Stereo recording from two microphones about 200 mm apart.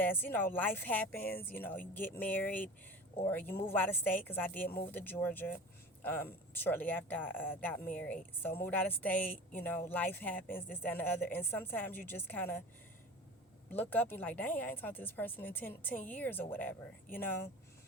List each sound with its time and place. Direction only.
0.0 s speech: 10° left (ahead or behind)
13.7 s speech: 10° left (ahead or behind)